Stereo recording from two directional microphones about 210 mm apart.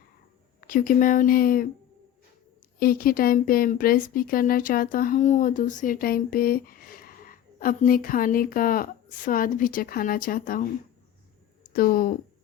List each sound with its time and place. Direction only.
0.7 s speech: 40° left (ahead or behind)
2.7 s speech: 45° left (ahead or behind)
11.7 s speech: 45° left (ahead or behind)